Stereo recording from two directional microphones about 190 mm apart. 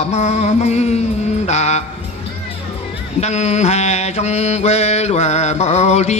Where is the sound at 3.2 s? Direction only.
35° left (ahead or behind).